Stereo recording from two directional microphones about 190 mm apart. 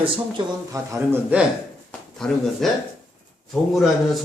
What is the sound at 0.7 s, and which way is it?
Speech, 15° right (ahead or behind).